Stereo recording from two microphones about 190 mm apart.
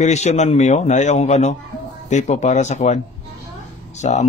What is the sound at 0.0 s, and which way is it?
Speech, 35° left (ahead or behind).